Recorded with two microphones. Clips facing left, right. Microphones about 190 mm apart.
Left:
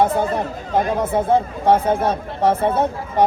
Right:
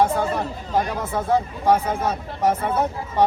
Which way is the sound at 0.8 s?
25° left (ahead or behind).